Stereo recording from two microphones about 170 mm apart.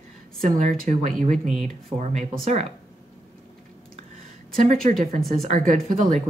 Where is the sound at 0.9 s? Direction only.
45° right (ahead or behind).